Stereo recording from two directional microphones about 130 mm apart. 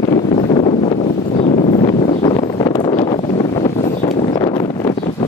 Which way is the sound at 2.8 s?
35° left (ahead or behind).